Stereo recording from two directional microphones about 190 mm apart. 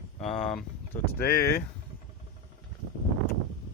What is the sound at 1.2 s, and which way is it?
Speech, 55° left (ahead or behind).